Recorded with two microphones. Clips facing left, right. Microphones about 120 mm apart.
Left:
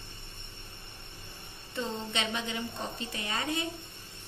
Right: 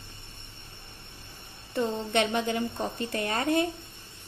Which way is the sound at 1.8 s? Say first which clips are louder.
Right 8 dB; 55° right (ahead or behind).